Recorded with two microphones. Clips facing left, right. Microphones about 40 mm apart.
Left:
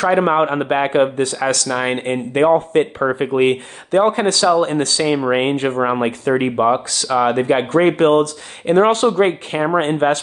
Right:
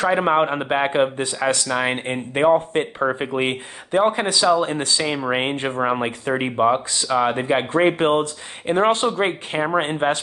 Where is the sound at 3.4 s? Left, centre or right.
Centre.